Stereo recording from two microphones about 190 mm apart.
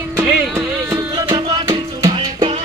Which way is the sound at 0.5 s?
15° right (ahead or behind).